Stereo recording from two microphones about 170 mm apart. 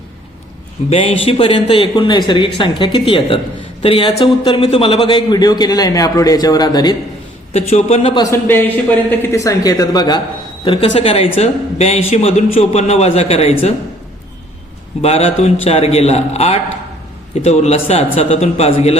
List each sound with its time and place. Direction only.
0.9 s a man's voice: 35° left (ahead or behind)
7.5 s speech: 40° left (ahead or behind)
15.0 s speech: 35° left (ahead or behind)